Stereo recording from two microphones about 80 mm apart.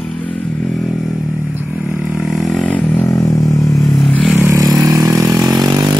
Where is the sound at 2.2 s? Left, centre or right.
Centre.